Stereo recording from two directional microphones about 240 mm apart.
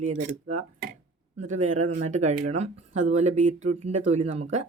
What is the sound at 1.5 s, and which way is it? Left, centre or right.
Speech, right.